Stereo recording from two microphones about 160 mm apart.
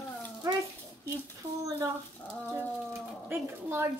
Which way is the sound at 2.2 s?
10° left (ahead or behind).